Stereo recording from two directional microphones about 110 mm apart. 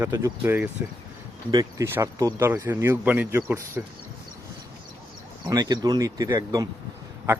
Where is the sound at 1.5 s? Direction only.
40° right (ahead or behind).